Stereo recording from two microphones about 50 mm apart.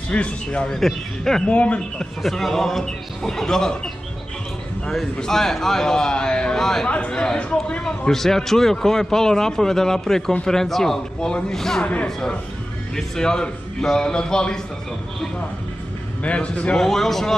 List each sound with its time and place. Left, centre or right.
0.1 s speech: left
0.7 s a man's voice: centre
1.5 s speech: left
2.2 s a man's voice: centre
5.2 s a man's voice: centre
12.9 s a man's voice: centre
16.2 s speech: left
16.7 s a man's voice: centre